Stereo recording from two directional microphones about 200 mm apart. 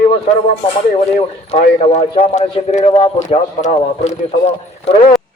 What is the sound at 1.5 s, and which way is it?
A man's voice, 30° left (ahead or behind).